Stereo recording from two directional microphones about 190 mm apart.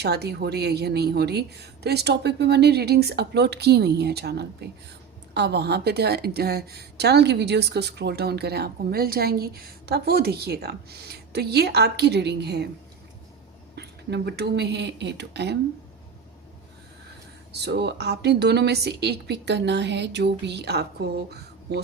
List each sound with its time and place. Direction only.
0.0 s a woman's voice: 60° right (ahead or behind)
13.7 s a woman's voice: 60° right (ahead or behind)
17.5 s a woman's voice: 60° right (ahead or behind)